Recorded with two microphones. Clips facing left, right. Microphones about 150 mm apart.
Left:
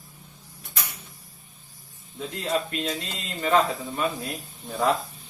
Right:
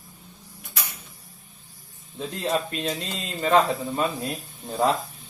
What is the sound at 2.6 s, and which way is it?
Speech, 25° right (ahead or behind).